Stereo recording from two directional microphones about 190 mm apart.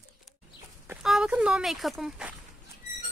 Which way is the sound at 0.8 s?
5° right (ahead or behind).